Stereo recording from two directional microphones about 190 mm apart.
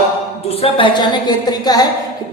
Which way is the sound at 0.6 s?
25° left (ahead or behind).